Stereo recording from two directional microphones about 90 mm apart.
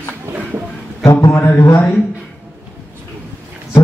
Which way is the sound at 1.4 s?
25° left (ahead or behind).